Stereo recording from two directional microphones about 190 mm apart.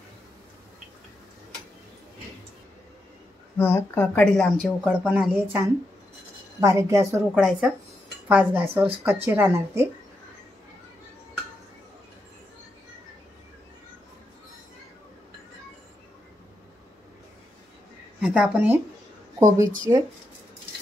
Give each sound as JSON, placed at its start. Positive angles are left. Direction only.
{"t": 3.5, "sound": "a woman's voice", "side_deg": 10}
{"t": 6.6, "sound": "a woman's voice", "side_deg": -15}
{"t": 7.3, "sound": "a woman's voice", "side_deg": -5}
{"t": 18.2, "sound": "a woman's voice", "side_deg": -5}